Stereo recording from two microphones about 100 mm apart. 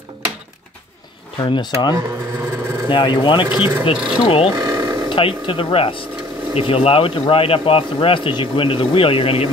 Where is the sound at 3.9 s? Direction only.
10° right (ahead or behind).